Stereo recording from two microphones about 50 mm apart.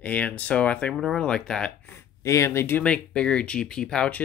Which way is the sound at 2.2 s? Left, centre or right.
Left.